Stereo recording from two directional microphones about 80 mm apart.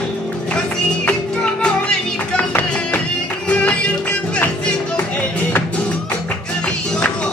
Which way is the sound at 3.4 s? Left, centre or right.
Centre.